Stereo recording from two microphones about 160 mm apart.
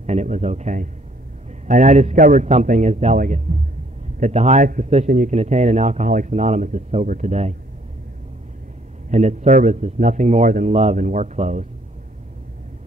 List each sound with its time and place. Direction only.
0.0 s speech: 45° right (ahead or behind)
9.1 s speech: 45° right (ahead or behind)